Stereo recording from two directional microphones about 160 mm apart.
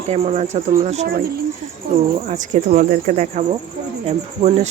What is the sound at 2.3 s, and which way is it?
Speech, 50° right (ahead or behind).